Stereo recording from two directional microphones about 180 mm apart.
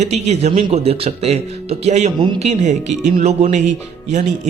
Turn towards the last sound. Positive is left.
turn(degrees=-40)  # may be behind; listen again after turning